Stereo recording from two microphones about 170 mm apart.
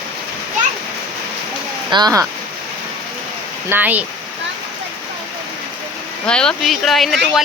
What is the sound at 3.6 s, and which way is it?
Speech, 10° right (ahead or behind).